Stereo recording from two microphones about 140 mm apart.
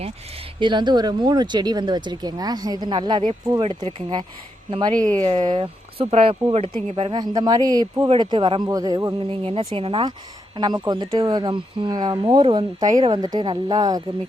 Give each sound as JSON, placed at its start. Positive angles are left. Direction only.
{"t": 0.6, "sound": "speech", "side_deg": -30}
{"t": 4.9, "sound": "speech", "side_deg": 10}
{"t": 5.2, "sound": "speech", "side_deg": -30}
{"t": 7.1, "sound": "speech", "side_deg": -30}
{"t": 9.3, "sound": "speech", "side_deg": -40}